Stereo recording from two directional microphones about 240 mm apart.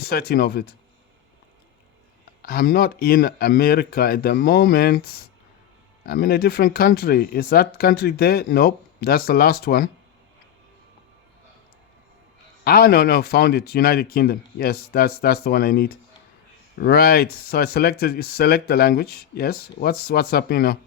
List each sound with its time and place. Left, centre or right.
0.0 s speech: left
2.4 s speech: left
6.1 s speech: left
12.6 s speech: left